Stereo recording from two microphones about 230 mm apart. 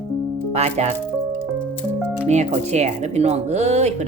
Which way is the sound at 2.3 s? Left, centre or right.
Right.